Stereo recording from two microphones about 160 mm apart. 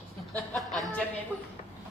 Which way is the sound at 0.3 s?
5° left (ahead or behind).